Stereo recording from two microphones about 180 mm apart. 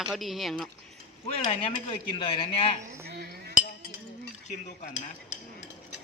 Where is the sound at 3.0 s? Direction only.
60° right (ahead or behind).